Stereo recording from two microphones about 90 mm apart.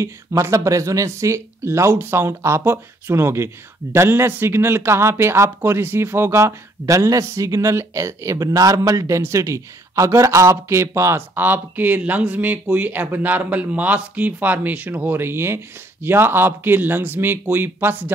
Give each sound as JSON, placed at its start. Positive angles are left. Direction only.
{"t": 0.0, "sound": "speech", "side_deg": -35}